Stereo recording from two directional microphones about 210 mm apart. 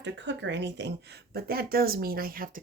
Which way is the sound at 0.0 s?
60° right (ahead or behind).